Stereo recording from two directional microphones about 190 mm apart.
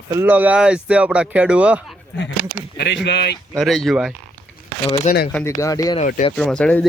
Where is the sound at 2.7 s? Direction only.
65° left (ahead or behind).